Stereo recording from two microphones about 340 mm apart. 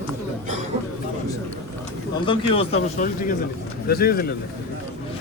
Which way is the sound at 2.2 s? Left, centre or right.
Centre.